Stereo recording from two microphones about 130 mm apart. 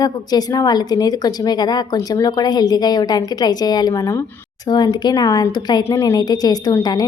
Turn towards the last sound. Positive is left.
turn(degrees=30)  # may be behind; listen again after turning